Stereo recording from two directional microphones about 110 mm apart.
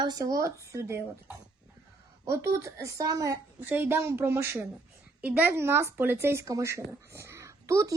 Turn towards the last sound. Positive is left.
turn(degrees=-30)  # may be behind; listen again after turning